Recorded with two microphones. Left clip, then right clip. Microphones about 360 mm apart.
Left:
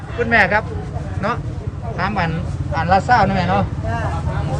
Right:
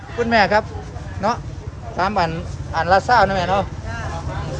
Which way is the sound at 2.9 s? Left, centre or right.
Right.